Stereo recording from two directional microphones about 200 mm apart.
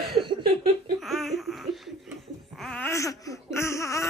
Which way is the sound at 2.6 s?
5° left (ahead or behind).